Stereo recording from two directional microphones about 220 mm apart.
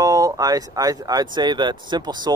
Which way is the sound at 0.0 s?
15° right (ahead or behind).